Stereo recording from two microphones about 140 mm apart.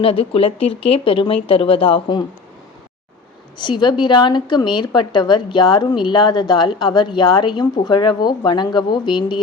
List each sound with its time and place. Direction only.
0.0 s a woman's voice: 45° left (ahead or behind)
3.6 s a woman's voice: 35° left (ahead or behind)